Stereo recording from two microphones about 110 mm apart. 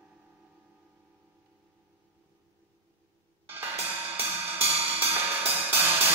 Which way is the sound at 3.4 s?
20° right (ahead or behind).